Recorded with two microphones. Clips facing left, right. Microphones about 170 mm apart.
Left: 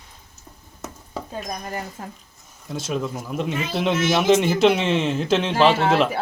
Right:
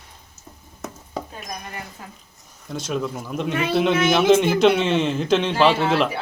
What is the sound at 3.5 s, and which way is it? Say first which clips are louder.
Speech: right 4 dB; 65° right (ahead or behind).